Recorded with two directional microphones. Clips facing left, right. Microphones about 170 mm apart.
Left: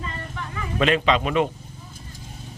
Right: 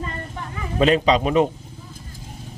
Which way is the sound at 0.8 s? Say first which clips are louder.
Right 3 dB; 35° right (ahead or behind).